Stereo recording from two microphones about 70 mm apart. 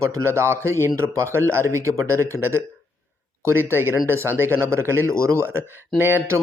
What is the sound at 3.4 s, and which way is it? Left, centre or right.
Speech, right.